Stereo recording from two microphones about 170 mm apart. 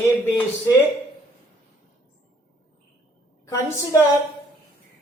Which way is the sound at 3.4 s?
15° left (ahead or behind).